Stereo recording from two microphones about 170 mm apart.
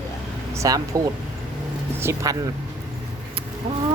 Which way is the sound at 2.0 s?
15° right (ahead or behind).